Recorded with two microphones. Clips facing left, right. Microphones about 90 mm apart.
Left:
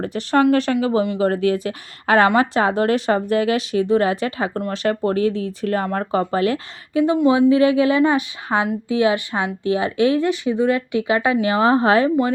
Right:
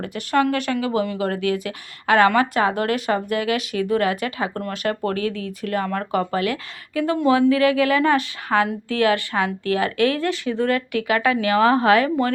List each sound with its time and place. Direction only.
0.0 s speech: 30° left (ahead or behind)
7.3 s a woman's voice: 20° left (ahead or behind)